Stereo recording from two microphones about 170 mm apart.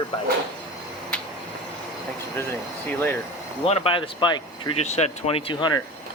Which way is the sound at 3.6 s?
35° left (ahead or behind).